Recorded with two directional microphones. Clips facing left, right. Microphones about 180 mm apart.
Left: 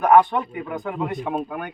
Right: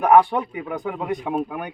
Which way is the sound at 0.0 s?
10° right (ahead or behind).